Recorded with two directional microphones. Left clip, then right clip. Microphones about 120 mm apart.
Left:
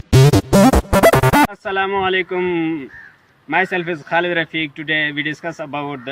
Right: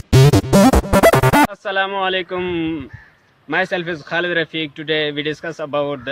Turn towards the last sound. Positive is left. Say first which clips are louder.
# right 4 dB
turn(degrees=-40)  # may be behind; listen again after turning